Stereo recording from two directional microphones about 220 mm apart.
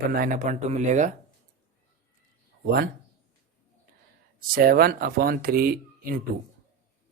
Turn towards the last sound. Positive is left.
turn(degrees=-40)  # may be behind; listen again after turning